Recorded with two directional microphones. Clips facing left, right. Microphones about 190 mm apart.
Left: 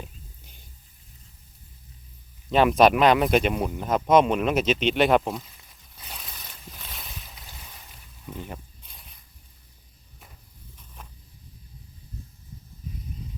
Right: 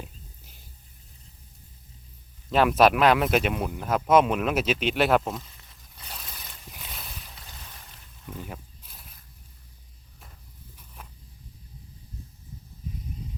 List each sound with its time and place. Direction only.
2.5 s speech: centre (ahead or behind)
6.0 s boat: centre (ahead or behind)
8.4 s snake: centre (ahead or behind)